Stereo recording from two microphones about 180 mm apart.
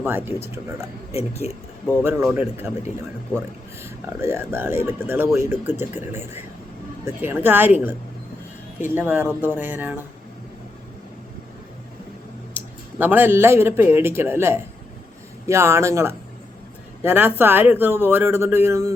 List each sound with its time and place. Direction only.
0.0 s speech: 10° right (ahead or behind)
1.1 s speech: 35° left (ahead or behind)
2.0 s speech: 10° right (ahead or behind)
3.8 s speech: 15° right (ahead or behind)
12.5 s speech: 10° right (ahead or behind)